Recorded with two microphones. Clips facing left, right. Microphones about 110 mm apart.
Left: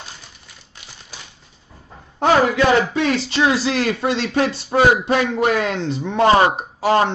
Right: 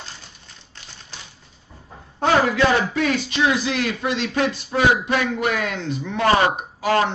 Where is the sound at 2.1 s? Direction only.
25° left (ahead or behind).